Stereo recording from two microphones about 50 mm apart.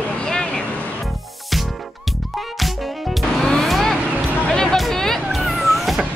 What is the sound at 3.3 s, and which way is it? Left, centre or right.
Music, centre.